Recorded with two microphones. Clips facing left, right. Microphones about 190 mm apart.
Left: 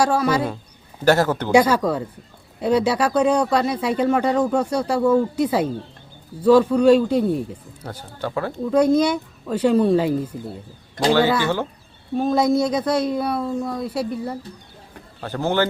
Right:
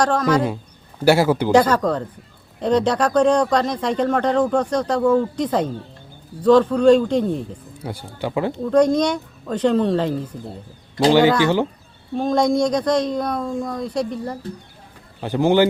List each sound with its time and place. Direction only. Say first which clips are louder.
0.0 s speech: right 1 dB; 10° left (ahead or behind)
1.0 s speech: right 2 dB; 10° right (ahead or behind)
1.5 s speech: left 2 dB; 10° left (ahead or behind)
7.9 s speech: right 2 dB; 15° right (ahead or behind)
8.6 s speech: even; 5° left (ahead or behind)
11.0 s speech: right 3 dB; 15° right (ahead or behind)
12.1 s speech: even; 5° left (ahead or behind)
15.2 s speech: right 5 dB; 15° right (ahead or behind)